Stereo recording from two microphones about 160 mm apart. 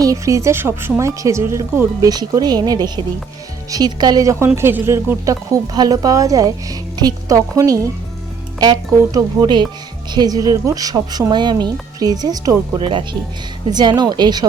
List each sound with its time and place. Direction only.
0.0 s speech: 20° right (ahead or behind)